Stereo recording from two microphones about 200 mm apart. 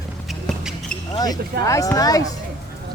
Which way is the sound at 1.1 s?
20° left (ahead or behind).